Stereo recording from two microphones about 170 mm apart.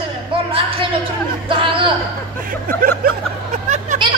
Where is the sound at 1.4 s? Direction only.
30° right (ahead or behind).